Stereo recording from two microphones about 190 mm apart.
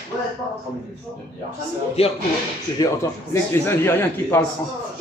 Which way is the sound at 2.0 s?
30° left (ahead or behind).